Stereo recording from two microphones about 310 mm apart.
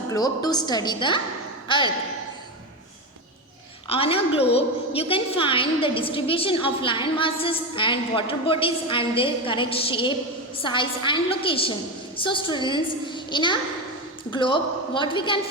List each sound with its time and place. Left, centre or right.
0.1 s a woman's voice: centre
3.8 s a woman's voice: centre